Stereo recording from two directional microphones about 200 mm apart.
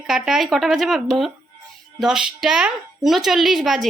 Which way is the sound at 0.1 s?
5° right (ahead or behind).